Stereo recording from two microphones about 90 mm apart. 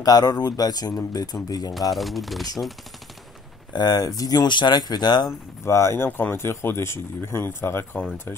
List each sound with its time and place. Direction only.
0.0 s speech: 45° left (ahead or behind)
1.7 s speech: centre (ahead or behind)
3.7 s speech: 50° left (ahead or behind)
5.6 s speech: 30° left (ahead or behind)